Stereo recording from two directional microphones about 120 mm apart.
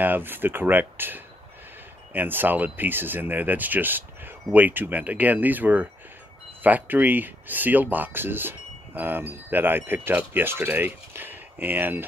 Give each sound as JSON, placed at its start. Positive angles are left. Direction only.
{"t": 0.0, "sound": "speech", "side_deg": -15}